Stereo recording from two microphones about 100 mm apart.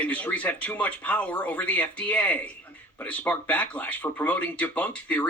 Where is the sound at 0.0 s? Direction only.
15° left (ahead or behind).